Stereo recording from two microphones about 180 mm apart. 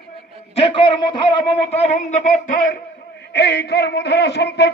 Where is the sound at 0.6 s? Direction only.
25° left (ahead or behind); by 2.8 s 45° left (ahead or behind).